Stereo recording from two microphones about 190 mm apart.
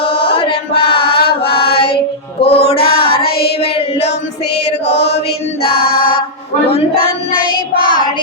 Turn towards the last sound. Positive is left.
turn(degrees=50)  # may be behind; listen again after turning